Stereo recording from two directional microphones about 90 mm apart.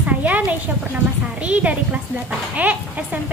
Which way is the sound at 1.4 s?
15° right (ahead or behind).